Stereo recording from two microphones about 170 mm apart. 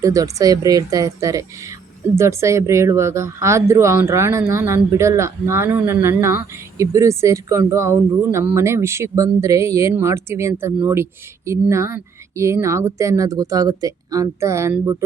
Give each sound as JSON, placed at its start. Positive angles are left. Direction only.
{"t": 0.0, "sound": "speech", "side_deg": -20}